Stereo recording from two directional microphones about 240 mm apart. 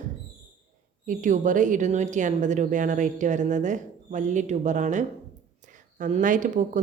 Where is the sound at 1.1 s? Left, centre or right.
Right.